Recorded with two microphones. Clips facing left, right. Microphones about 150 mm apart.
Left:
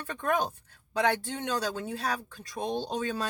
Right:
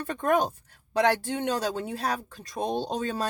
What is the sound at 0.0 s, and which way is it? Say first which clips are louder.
Speech: right 5 dB; 40° right (ahead or behind).